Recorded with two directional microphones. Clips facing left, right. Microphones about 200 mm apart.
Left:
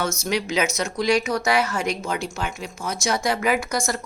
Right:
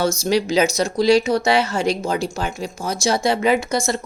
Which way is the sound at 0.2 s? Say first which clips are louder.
Right 6 dB; 35° right (ahead or behind).